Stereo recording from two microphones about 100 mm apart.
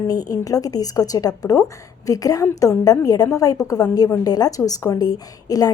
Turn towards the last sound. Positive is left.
turn(degrees=40)  # may be behind; listen again after turning